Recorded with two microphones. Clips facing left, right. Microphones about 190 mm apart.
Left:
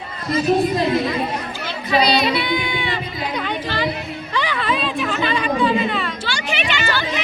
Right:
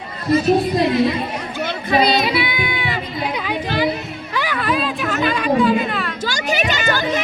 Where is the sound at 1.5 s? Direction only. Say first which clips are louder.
Right 3 dB; 50° right (ahead or behind).